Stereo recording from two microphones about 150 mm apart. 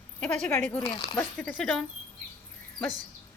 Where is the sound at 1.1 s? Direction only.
10° left (ahead or behind).